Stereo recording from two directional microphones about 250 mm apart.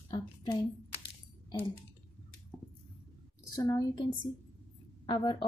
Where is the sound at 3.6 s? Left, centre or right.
Centre.